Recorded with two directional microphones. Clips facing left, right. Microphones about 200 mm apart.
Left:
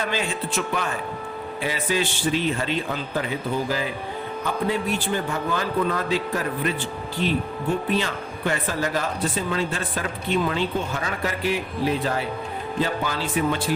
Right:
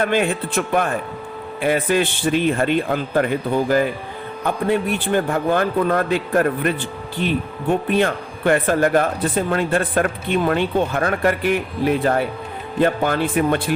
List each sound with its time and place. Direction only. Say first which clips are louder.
0.0 s speech: right 7 dB; 55° right (ahead or behind)
7.9 s speech: right 6 dB; 55° right (ahead or behind)